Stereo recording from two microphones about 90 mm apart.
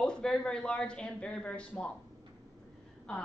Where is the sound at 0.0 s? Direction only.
10° left (ahead or behind).